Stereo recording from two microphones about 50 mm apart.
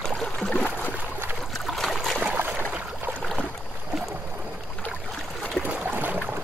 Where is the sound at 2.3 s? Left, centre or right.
Right.